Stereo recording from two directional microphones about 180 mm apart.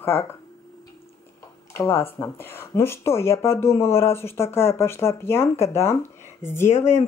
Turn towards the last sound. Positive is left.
turn(degrees=15)  # may be behind; listen again after turning